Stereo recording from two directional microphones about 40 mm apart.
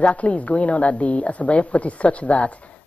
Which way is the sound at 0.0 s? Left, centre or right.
Left.